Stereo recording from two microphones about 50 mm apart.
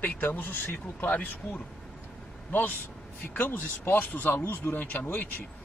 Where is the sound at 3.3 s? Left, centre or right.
Left.